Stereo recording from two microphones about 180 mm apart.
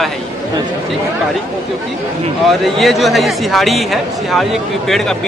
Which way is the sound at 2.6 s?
Centre (ahead or behind).